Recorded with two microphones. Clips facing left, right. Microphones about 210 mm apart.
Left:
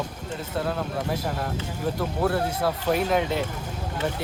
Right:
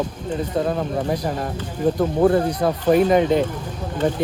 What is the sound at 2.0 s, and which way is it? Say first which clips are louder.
Speech: right 9 dB; 25° right (ahead or behind).